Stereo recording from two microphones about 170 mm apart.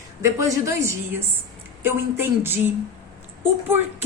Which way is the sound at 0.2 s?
15° right (ahead or behind).